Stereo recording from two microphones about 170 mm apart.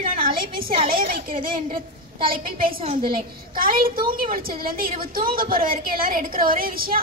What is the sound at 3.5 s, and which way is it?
A woman's voice, 60° right (ahead or behind).